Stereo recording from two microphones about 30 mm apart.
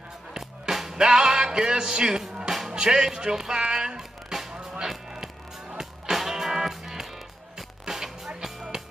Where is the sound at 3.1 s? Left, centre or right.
Centre.